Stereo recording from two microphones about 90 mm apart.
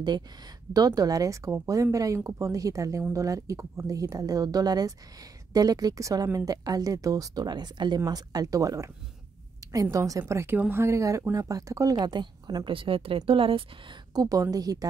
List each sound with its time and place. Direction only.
0.7 s speech: 45° right (ahead or behind)
12.6 s speech: 75° right (ahead or behind)
14.1 s speech: 45° right (ahead or behind)